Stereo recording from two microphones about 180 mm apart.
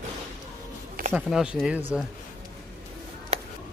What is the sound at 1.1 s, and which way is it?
Speech, 5° right (ahead or behind).